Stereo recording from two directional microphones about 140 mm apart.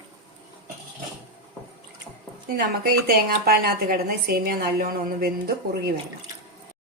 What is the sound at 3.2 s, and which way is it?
A woman's voice, 90° right.